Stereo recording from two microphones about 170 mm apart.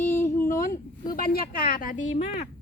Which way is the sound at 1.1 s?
60° left (ahead or behind).